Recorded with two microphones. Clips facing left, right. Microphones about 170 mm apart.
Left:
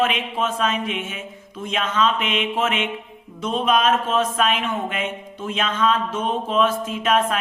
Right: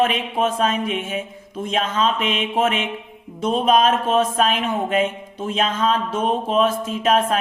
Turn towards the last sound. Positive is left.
turn(degrees=-35)  # may be behind; listen again after turning